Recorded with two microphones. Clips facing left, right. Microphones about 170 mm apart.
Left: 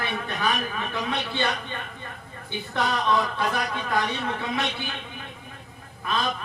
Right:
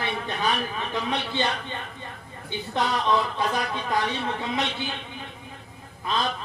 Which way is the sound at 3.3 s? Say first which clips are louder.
Even; 20° right (ahead or behind).